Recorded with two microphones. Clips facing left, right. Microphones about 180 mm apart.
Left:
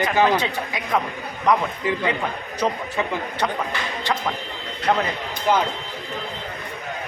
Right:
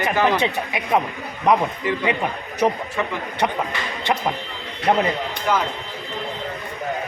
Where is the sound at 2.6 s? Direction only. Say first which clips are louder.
Right 4 dB; 20° right (ahead or behind).